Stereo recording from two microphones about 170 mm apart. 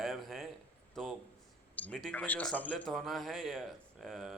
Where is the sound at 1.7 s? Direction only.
10° left (ahead or behind).